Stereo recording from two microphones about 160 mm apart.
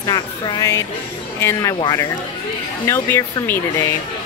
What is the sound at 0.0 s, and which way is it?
Speech, 25° left (ahead or behind).